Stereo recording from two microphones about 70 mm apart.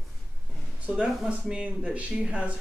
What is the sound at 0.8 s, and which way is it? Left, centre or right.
Speech, centre.